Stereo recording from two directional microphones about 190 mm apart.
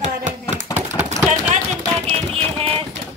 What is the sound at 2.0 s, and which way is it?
Speech, 30° right (ahead or behind).